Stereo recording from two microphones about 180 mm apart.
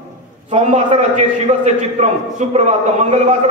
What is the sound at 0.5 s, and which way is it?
A man's voice, 40° right (ahead or behind).